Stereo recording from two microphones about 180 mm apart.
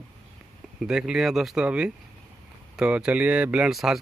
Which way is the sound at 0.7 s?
5° right (ahead or behind).